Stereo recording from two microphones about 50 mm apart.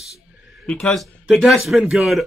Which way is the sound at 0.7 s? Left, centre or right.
Left.